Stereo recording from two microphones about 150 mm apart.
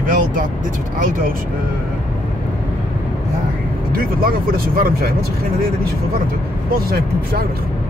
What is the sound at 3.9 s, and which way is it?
Speech, 75° right (ahead or behind).